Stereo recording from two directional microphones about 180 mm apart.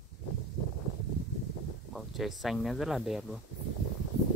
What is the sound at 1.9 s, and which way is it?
Speech, centre (ahead or behind).